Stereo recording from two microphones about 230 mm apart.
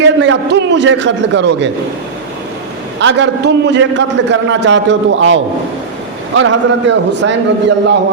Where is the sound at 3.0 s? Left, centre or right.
Right.